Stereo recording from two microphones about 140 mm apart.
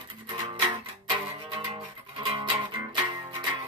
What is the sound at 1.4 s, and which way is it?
Music, 35° right (ahead or behind).